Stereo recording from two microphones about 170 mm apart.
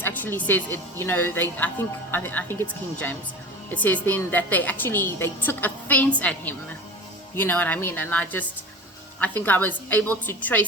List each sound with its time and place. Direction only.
0.0 s speech: 10° left (ahead or behind)